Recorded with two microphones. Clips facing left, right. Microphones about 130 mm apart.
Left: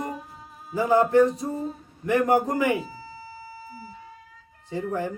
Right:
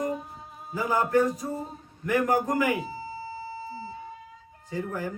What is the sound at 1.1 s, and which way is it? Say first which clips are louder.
Speech: left 4 dB; 25° left (ahead or behind).